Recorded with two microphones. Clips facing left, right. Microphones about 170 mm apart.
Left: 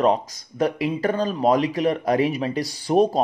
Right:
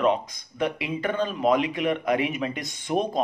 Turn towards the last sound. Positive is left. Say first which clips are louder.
# left 7 dB
turn(degrees=35)  # may be behind; listen again after turning